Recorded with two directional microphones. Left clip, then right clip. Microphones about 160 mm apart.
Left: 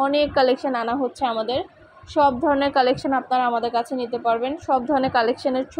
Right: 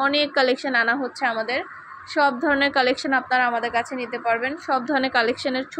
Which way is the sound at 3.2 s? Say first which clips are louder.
Left 1 dB; 30° left (ahead or behind).